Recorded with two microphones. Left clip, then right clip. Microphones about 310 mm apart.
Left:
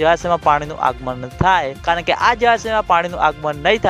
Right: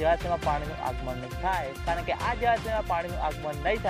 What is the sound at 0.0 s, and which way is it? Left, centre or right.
Speech, left.